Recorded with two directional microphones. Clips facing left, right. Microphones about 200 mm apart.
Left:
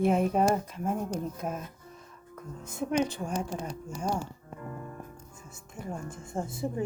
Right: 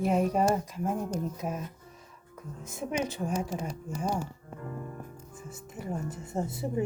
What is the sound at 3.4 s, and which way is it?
Speech, 5° right (ahead or behind).